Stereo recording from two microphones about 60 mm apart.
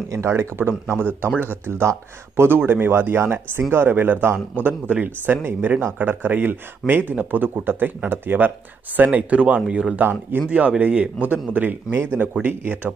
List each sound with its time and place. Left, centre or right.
0.1 s speech: right; by 9.9 s centre
9.9 s speech: right
10.8 s speech: right